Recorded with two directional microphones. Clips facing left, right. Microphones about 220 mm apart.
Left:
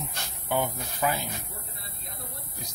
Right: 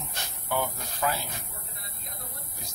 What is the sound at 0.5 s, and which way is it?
Speech, 15° left (ahead or behind).